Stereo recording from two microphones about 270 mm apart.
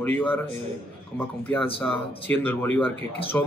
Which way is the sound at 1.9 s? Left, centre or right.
Centre.